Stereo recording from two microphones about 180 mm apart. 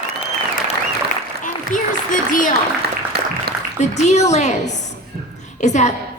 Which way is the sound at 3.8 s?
40° left (ahead or behind).